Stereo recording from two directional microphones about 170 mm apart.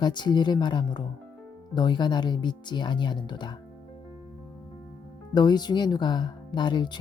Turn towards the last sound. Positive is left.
turn(degrees=25)  # may be behind; listen again after turning